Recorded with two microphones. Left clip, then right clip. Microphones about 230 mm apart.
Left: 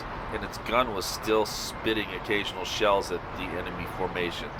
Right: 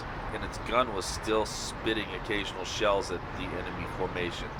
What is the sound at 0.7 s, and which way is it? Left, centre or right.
Speech, left.